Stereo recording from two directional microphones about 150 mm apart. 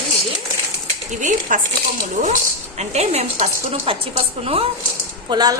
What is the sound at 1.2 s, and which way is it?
Speech, 60° right (ahead or behind).